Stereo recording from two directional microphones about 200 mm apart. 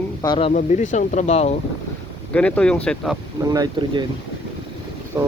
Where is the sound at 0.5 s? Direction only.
40° left (ahead or behind).